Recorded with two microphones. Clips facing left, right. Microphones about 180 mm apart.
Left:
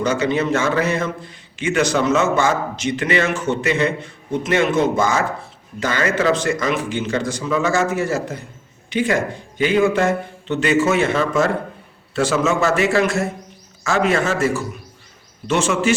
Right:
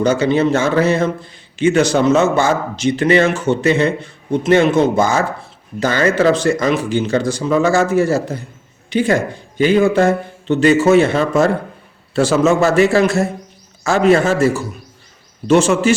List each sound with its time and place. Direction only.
0.0 s a man's voice: 30° right (ahead or behind)